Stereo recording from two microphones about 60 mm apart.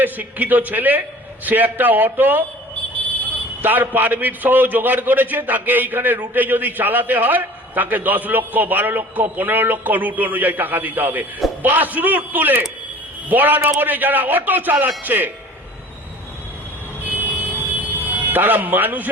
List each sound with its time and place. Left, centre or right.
0.0 s a man's voice: right
3.6 s a man's voice: right
17.1 s vehicle: right
17.7 s a sound: right